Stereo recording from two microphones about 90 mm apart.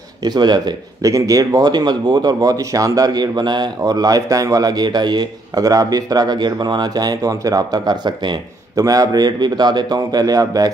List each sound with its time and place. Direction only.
0.2 s speech: 50° right (ahead or behind)